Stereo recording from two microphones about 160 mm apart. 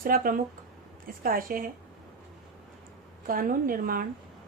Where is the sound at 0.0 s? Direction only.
60° right (ahead or behind).